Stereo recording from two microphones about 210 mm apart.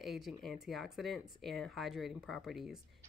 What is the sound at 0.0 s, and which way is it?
Speech, centre (ahead or behind).